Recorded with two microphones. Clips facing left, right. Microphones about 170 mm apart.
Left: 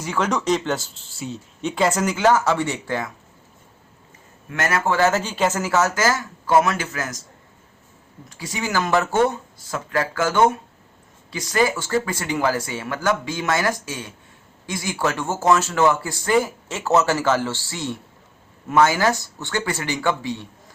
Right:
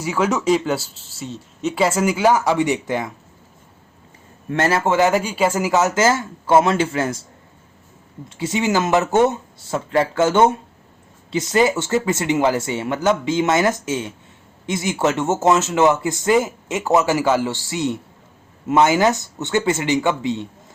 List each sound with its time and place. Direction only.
0.0 s speech: 10° right (ahead or behind)
4.4 s speech: 30° right (ahead or behind)
8.3 s speech: 25° right (ahead or behind)